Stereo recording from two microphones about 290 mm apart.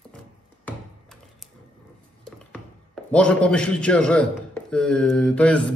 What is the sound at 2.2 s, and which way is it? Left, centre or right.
A man's voice, centre.